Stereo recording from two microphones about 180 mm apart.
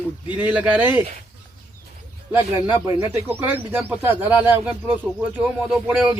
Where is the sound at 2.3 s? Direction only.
10° right (ahead or behind).